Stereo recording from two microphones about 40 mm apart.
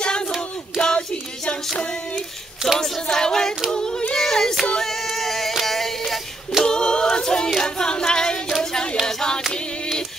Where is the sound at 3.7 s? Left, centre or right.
Centre.